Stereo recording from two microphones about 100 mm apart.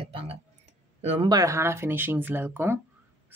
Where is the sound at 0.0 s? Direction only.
70° right (ahead or behind).